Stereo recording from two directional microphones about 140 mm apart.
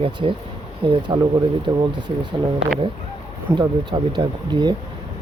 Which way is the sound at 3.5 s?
25° right (ahead or behind).